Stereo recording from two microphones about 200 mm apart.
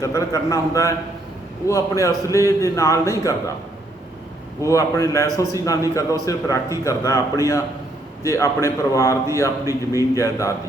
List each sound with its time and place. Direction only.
0.0 s a man's voice: 15° left (ahead or behind)
4.6 s a man's voice: 15° left (ahead or behind)